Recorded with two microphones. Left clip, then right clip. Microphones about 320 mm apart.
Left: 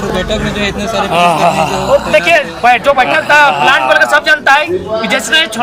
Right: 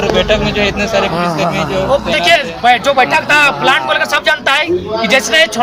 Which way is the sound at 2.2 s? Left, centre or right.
Centre.